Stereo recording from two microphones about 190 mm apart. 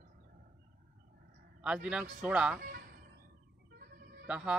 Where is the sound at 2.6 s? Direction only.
50° right (ahead or behind).